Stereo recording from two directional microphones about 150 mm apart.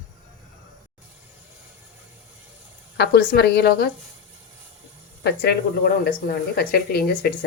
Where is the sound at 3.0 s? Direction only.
90° left.